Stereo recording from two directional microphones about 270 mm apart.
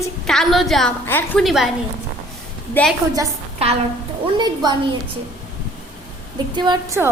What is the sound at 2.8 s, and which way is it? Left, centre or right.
Speech, centre.